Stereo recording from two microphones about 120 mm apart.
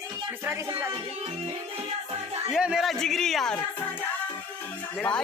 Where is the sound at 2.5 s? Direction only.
5° right (ahead or behind).